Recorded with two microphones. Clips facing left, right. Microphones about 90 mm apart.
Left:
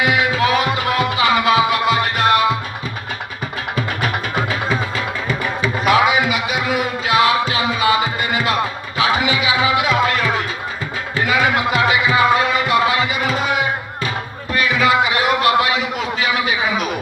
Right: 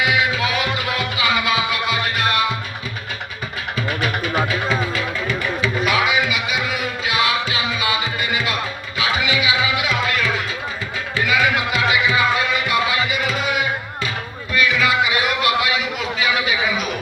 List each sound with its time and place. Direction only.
0.0 s music: 40° left (ahead or behind)
3.8 s music: 40° left (ahead or behind)
12.4 s music: 35° left (ahead or behind)
14.5 s a sound: 40° left (ahead or behind)